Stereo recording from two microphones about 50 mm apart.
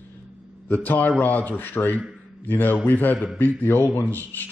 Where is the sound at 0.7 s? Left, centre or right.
Left.